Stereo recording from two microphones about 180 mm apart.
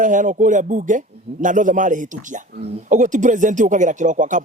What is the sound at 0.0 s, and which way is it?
Speech, 45° right (ahead or behind).